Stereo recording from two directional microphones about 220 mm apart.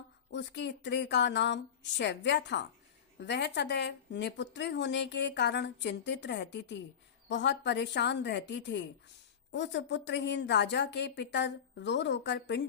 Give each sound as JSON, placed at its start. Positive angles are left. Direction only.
{"t": 0.3, "sound": "a woman's voice", "side_deg": 55}